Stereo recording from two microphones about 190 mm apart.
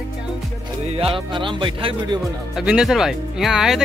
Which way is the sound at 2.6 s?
5° right (ahead or behind).